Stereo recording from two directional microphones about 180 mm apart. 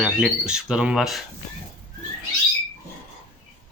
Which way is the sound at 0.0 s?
5° right (ahead or behind).